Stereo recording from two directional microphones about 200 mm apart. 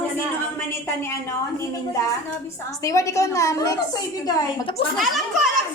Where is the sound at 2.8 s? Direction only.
15° left (ahead or behind).